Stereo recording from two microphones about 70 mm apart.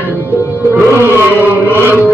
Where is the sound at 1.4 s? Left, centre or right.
Right.